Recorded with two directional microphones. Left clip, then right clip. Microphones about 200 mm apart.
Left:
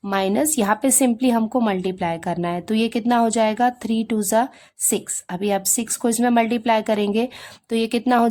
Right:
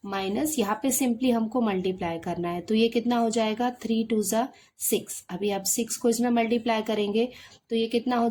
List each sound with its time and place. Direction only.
0.1 s a woman's voice: 40° left (ahead or behind)